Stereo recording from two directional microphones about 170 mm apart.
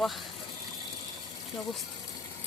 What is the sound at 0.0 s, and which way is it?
Speech, centre (ahead or behind).